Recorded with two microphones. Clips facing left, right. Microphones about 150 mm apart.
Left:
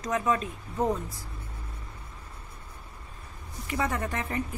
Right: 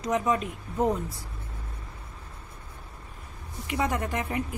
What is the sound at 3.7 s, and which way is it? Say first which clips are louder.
Speech: right 2 dB; 15° right (ahead or behind).